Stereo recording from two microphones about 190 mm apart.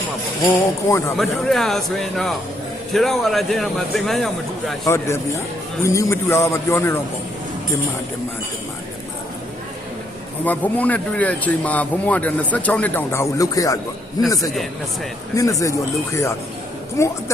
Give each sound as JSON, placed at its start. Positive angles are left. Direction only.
{"t": 0.4, "sound": "speech", "side_deg": 15}
{"t": 1.2, "sound": "speech", "side_deg": 0}
{"t": 4.9, "sound": "speech", "side_deg": 15}
{"t": 10.4, "sound": "speech", "side_deg": 10}
{"t": 15.4, "sound": "speech", "side_deg": 15}
{"t": 17.0, "sound": "speech", "side_deg": 15}